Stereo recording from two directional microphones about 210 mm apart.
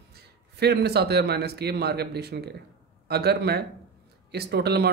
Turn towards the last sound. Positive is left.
turn(degrees=-50)  # may be behind; listen again after turning